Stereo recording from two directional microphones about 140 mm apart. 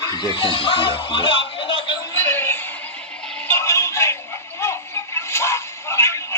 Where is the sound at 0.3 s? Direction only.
40° left (ahead or behind).